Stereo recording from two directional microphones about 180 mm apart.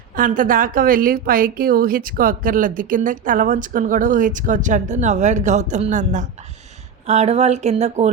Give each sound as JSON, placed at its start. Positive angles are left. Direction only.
{"t": 0.2, "sound": "a woman's voice", "side_deg": -50}